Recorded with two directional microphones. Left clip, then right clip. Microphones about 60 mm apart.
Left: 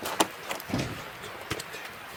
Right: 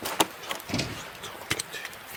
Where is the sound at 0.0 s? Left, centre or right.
Right.